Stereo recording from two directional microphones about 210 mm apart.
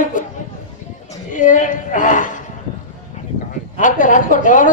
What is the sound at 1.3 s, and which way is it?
A man's voice, 40° left (ahead or behind).